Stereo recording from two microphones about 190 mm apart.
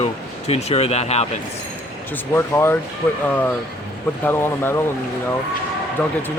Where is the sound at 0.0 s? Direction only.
35° left (ahead or behind).